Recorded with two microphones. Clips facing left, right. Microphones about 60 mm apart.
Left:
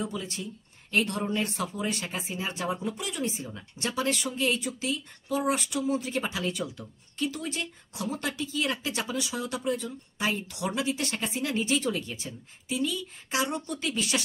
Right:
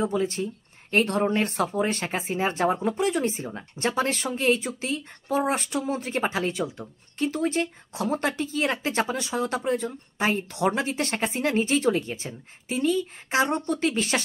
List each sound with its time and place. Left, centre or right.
0.0 s speech: right